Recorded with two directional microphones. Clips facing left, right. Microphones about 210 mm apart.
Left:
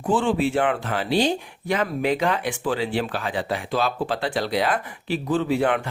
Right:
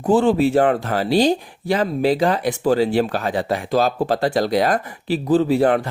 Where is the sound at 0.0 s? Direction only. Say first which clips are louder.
Right 6 dB; 40° right (ahead or behind).